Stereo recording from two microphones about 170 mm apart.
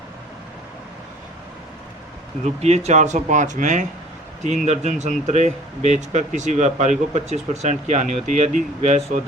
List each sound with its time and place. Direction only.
2.4 s speech: 40° right (ahead or behind)